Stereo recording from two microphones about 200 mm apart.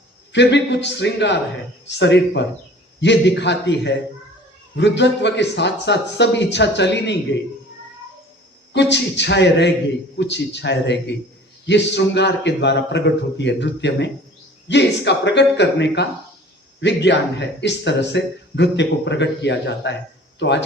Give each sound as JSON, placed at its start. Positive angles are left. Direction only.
{"t": 0.3, "sound": "speech", "side_deg": 60}
{"t": 8.7, "sound": "speech", "side_deg": 60}